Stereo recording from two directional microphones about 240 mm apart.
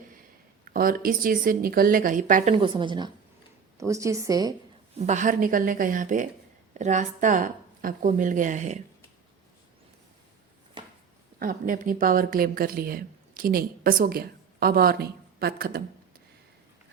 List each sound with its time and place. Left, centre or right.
0.6 s speech: right; by 4.5 s centre
4.9 s speech: right
11.3 s speech: right